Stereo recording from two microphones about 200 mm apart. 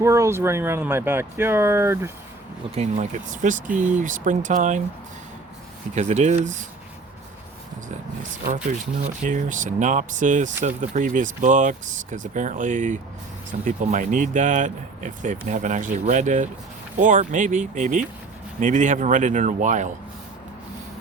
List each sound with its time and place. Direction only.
0.0 s speech: 15° right (ahead or behind)
2.7 s speech: 35° right (ahead or behind)
5.9 s speech: 35° right (ahead or behind)
8.5 s speech: 35° right (ahead or behind)